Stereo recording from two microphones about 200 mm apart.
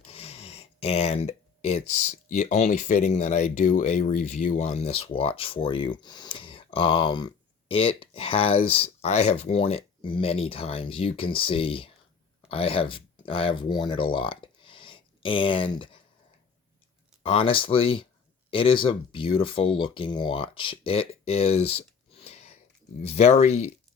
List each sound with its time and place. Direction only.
0.0 s speech: 30° left (ahead or behind)
17.2 s speech: 25° left (ahead or behind)